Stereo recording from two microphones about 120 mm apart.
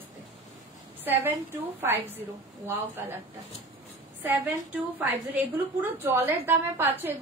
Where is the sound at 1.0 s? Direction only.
15° right (ahead or behind).